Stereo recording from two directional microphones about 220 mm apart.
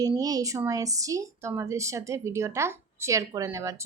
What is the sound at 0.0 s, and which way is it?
A woman's voice, 15° right (ahead or behind).